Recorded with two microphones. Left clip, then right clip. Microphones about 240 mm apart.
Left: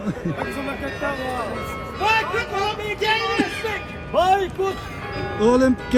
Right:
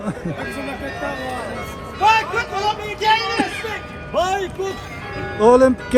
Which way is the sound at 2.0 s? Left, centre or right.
Right.